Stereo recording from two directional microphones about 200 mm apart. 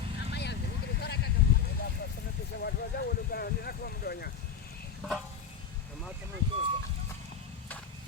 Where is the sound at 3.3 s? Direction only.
50° left (ahead or behind).